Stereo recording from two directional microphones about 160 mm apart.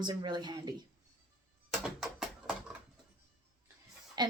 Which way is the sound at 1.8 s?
5° right (ahead or behind).